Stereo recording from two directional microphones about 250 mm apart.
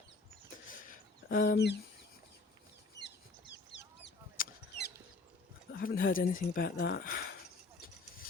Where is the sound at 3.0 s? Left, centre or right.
Left.